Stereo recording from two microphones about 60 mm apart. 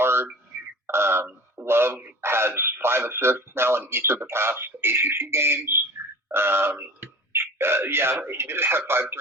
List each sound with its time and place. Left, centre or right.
0.0 s a sound: right
2.2 s radio: right
2.6 s speech: right